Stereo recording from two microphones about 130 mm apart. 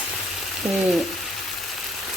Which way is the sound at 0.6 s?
Centre (ahead or behind).